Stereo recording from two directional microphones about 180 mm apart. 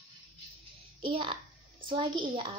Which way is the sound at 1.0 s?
30° right (ahead or behind).